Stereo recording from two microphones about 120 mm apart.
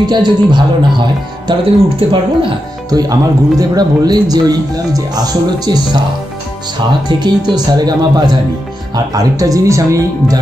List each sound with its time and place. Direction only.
0.0 s speech: 40° right (ahead or behind)
7.1 s speech: 40° right (ahead or behind)